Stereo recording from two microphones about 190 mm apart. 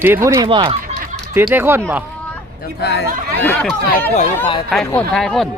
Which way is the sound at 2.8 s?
65° left (ahead or behind).